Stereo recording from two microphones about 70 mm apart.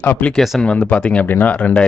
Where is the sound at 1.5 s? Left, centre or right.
Centre.